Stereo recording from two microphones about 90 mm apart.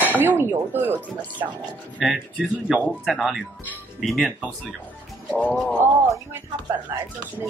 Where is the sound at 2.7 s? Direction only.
5° right (ahead or behind).